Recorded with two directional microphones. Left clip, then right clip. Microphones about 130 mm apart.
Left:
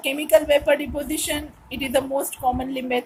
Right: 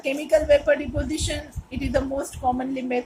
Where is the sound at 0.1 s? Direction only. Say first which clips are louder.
Left 1 dB; 65° left (ahead or behind).